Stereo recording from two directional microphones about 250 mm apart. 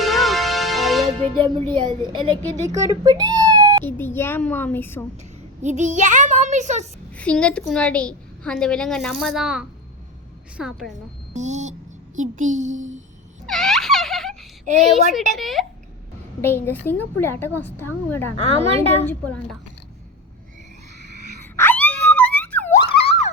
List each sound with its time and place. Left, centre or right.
0.0 s music: centre
1.4 s a child's voice: centre
3.8 s a woman's voice: centre
5.6 s a child's voice: right
7.1 s a woman's voice: centre
11.3 s a child's voice: right
13.5 s a sound: centre
14.8 s a woman's voice: centre
18.5 s a child's voice: right
19.0 s a woman's voice: centre
21.4 s wail: centre